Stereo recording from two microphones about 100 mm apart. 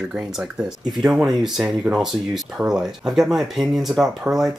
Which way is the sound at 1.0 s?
5° right (ahead or behind).